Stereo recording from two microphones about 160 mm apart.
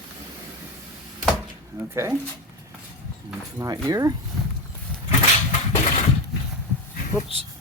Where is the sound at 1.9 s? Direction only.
15° right (ahead or behind).